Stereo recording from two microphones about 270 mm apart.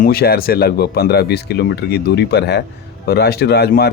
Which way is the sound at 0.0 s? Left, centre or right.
Left.